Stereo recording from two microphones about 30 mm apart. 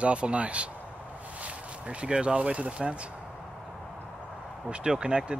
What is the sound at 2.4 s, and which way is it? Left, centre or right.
Speech, right.